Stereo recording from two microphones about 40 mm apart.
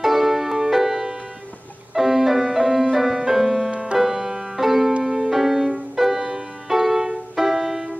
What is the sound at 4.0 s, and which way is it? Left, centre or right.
Music, centre.